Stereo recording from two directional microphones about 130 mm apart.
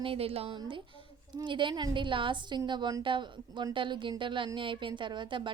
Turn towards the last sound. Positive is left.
turn(degrees=-40)  # may be behind; listen again after turning